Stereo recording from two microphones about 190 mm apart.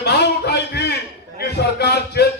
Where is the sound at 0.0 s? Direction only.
60° left (ahead or behind).